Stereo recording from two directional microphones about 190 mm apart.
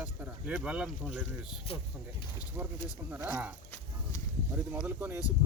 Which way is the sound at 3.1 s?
10° right (ahead or behind).